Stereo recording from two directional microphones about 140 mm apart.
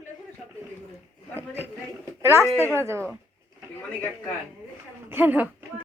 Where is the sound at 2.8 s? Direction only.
20° right (ahead or behind).